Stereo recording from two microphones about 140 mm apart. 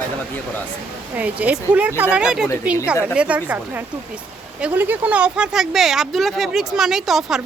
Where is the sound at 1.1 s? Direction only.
10° right (ahead or behind).